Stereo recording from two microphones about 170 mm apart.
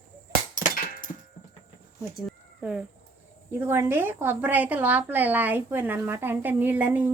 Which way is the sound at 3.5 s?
10° right (ahead or behind).